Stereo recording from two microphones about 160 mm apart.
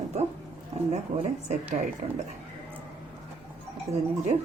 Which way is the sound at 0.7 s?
40° right (ahead or behind).